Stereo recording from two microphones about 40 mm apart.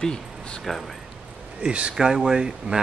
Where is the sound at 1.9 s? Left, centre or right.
Centre.